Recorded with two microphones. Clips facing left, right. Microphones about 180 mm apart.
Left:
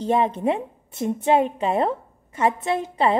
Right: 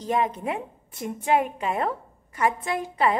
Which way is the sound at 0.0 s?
30° left (ahead or behind).